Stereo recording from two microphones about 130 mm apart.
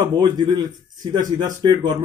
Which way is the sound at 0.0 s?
35° right (ahead or behind).